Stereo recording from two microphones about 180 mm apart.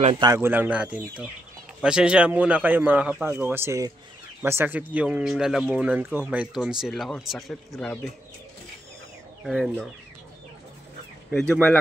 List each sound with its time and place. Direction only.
0.0 s speech: 25° right (ahead or behind)
0.4 s a man's voice: 10° right (ahead or behind)
9.4 s speech: 5° right (ahead or behind)
11.2 s speech: centre (ahead or behind)